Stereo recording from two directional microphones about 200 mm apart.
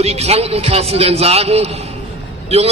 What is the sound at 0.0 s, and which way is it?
A man's voice, 30° right (ahead or behind).